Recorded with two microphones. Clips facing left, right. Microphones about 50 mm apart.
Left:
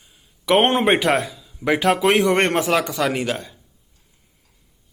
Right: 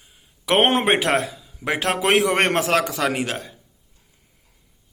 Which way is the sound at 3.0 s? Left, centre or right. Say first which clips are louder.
Left 1 dB; centre.